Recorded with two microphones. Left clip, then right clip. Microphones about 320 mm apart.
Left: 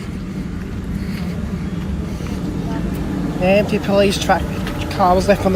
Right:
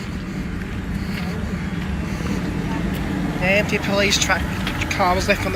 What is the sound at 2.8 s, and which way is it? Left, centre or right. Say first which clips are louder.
Vehicle: left 1 dB; centre.